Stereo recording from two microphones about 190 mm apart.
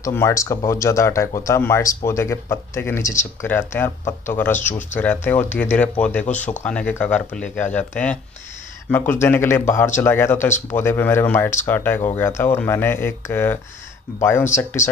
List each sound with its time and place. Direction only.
0.0 s speech: 15° left (ahead or behind)
6.2 s speech: 40° left (ahead or behind)
6.6 s speech: 5° left (ahead or behind)